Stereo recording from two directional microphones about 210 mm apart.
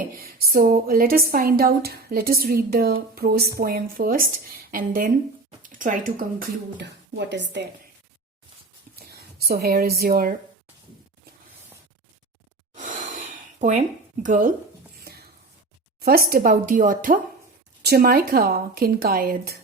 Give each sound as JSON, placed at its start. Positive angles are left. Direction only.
{"t": 0.2, "sound": "speech", "side_deg": -45}
{"t": 9.0, "sound": "speech", "side_deg": -45}
{"t": 12.7, "sound": "a sound", "side_deg": -35}
{"t": 16.0, "sound": "speech", "side_deg": -45}